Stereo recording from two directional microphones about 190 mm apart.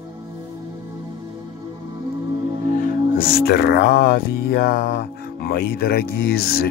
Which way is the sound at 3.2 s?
55° left (ahead or behind).